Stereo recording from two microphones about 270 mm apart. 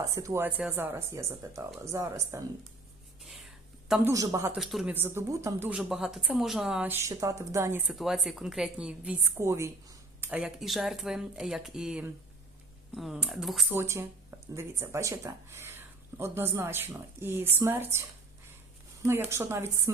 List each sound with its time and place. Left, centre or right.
0.0 s speech: centre
3.2 s speech: centre
19.0 s speech: centre